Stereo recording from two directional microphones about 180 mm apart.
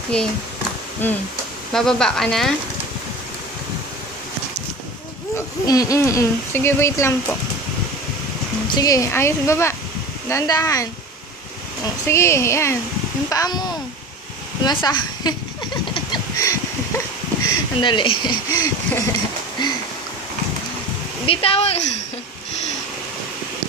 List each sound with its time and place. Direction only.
0.1 s speech: 5° left (ahead or behind)
1.7 s speech: 5° left (ahead or behind)
5.3 s speech: 20° left (ahead or behind)
8.6 s speech: 20° left (ahead or behind)
15.9 s a sound: 20° left (ahead or behind)
17.5 s speech: 25° left (ahead or behind)
21.3 s speech: 30° left (ahead or behind)